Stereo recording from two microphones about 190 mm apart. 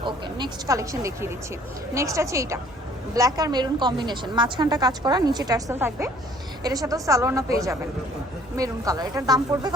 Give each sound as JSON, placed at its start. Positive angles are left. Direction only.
{"t": 0.0, "sound": "a woman's voice", "side_deg": -25}
{"t": 8.5, "sound": "a woman's voice", "side_deg": -15}